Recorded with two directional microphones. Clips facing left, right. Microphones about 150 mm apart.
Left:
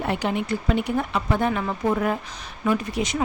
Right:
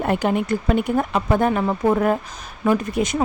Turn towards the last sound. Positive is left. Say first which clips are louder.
# right 4 dB
turn(degrees=-50)  # may be behind; listen again after turning